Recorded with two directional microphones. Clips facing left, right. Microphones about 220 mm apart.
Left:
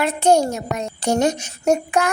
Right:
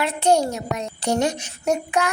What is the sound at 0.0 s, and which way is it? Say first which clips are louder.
Child singing: left 3 dB; 45° left (ahead or behind).